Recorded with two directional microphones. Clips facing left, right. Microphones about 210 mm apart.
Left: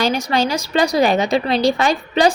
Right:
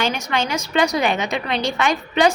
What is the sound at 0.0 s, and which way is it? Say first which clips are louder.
A woman's voice: left 4 dB; 35° left (ahead or behind).